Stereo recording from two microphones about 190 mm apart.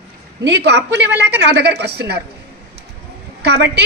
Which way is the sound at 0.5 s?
60° right (ahead or behind).